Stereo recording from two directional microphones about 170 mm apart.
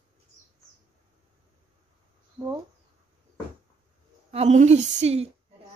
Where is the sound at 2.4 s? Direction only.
25° right (ahead or behind).